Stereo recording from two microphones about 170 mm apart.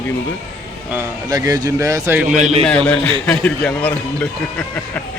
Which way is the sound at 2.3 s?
40° right (ahead or behind).